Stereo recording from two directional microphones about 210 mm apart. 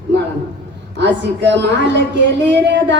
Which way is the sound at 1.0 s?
55° right (ahead or behind).